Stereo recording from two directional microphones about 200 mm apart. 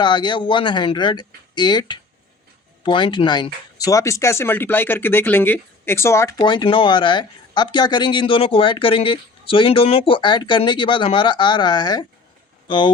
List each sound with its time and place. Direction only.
0.0 s speech: 20° left (ahead or behind)